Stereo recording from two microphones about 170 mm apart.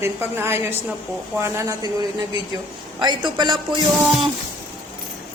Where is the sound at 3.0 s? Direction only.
25° right (ahead or behind).